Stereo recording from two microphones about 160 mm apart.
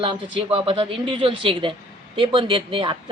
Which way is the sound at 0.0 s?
35° right (ahead or behind).